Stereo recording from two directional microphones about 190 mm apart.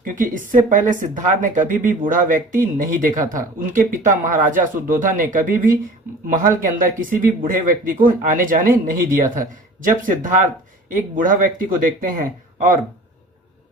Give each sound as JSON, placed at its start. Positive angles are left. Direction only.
{"t": 0.0, "sound": "speech", "side_deg": -45}